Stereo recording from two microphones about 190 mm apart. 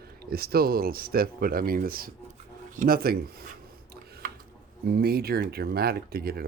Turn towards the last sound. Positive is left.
turn(degrees=-55)  # may be behind; listen again after turning